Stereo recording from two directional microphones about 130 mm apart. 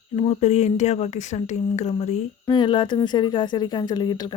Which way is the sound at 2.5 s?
35° left (ahead or behind).